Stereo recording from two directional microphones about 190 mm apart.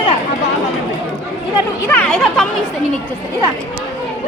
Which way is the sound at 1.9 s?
5° left (ahead or behind).